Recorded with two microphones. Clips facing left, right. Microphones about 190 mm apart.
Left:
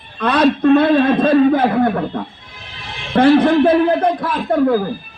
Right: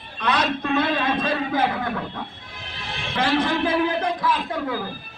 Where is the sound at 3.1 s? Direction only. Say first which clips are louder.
Left 11 dB; 60° left (ahead or behind).